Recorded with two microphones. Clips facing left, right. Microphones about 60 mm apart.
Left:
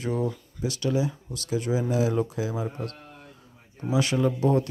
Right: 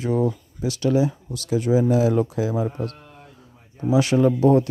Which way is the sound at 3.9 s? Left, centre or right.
Right.